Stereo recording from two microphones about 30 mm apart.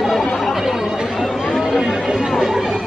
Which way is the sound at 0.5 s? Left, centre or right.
Centre.